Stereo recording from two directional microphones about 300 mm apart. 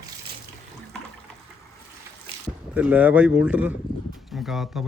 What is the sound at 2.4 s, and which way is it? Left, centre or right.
A man's voice, centre.